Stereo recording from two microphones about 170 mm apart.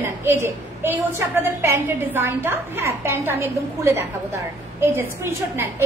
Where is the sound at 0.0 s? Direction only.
15° right (ahead or behind).